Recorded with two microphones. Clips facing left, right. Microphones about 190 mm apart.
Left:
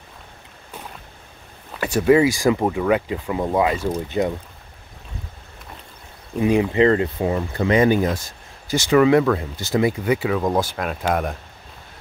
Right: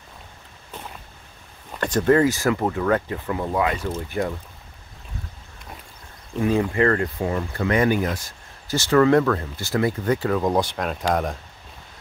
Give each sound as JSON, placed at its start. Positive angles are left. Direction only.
{"t": 1.7, "sound": "speech", "side_deg": 5}
{"t": 6.4, "sound": "speech", "side_deg": 15}